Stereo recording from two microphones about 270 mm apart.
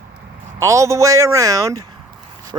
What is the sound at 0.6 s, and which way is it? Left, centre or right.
Speech, centre.